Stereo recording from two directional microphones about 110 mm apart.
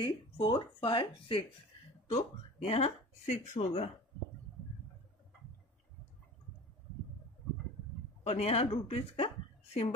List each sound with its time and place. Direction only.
0.0 s speech: 45° left (ahead or behind)
2.0 s speech: 65° left (ahead or behind)
8.3 s speech: 70° left (ahead or behind)